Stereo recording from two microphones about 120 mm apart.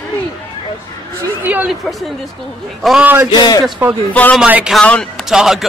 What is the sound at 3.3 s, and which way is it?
Speech, 35° left (ahead or behind).